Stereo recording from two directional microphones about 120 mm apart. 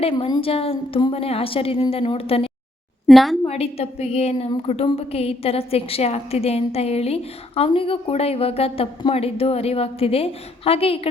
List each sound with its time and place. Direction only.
0.0 s a woman's voice: 55° left (ahead or behind)
3.1 s a woman's voice: centre (ahead or behind)
3.4 s a woman's voice: 60° left (ahead or behind)